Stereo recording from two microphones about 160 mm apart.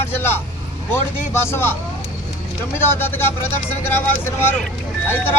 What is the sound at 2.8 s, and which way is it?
Speech, 15° left (ahead or behind).